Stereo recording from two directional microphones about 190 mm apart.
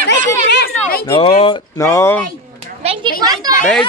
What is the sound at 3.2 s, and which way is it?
Speech, 20° right (ahead or behind).